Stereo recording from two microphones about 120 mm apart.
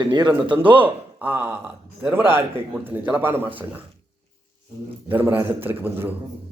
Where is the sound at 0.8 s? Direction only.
15° right (ahead or behind).